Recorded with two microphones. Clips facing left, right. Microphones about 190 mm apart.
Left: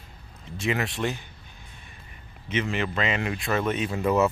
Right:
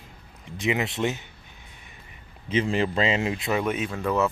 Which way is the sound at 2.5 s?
30° right (ahead or behind).